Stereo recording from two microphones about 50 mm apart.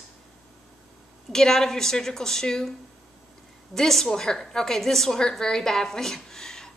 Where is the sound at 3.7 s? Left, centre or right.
Centre.